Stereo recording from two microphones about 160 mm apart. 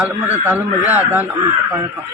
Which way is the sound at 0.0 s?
10° right (ahead or behind).